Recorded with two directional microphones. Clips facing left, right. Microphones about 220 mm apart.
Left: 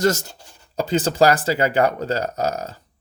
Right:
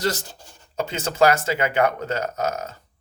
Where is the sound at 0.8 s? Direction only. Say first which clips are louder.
Left 3 dB; 35° left (ahead or behind).